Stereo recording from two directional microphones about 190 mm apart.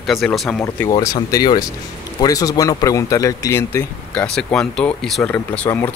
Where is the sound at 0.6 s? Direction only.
15° left (ahead or behind).